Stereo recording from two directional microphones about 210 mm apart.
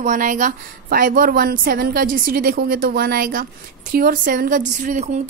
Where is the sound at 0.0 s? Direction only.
35° right (ahead or behind).